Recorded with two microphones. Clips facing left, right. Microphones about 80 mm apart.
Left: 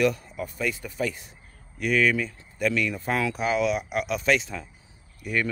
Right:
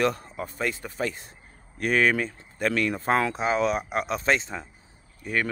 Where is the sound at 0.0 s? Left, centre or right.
Right.